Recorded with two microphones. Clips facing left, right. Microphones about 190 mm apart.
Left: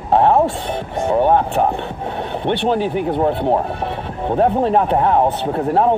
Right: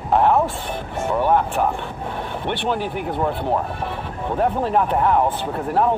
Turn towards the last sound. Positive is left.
turn(degrees=25)  # may be behind; listen again after turning